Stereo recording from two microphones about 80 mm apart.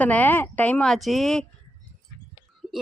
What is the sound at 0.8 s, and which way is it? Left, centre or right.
Speech, centre.